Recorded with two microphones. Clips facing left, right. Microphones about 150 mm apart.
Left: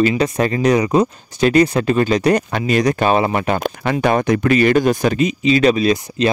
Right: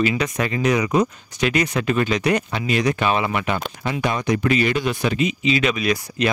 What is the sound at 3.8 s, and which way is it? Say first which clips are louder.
Speech: left 8 dB; 60° left (ahead or behind).